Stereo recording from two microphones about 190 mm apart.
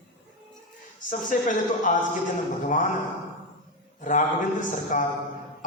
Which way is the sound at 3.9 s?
45° left (ahead or behind).